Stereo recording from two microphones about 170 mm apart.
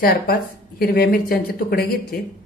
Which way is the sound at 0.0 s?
65° left (ahead or behind).